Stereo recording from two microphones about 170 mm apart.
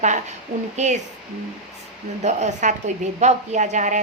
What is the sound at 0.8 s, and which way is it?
Speech, 45° right (ahead or behind).